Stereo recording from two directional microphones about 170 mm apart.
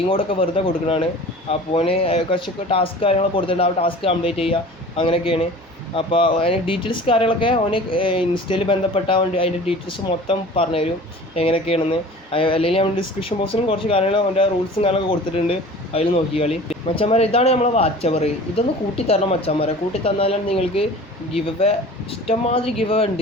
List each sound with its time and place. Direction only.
0.1 s speech: 30° left (ahead or behind)
10.2 s speech: 35° left (ahead or behind)